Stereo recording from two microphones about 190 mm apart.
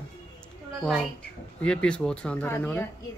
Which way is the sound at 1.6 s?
5° left (ahead or behind).